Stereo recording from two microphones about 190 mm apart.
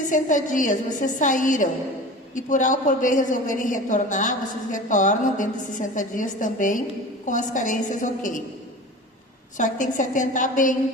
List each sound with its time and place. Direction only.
0.1 s a woman's voice: 45° left (ahead or behind)
9.6 s a woman's voice: 40° left (ahead or behind)